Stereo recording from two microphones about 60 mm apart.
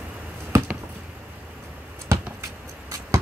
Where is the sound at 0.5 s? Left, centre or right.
Right.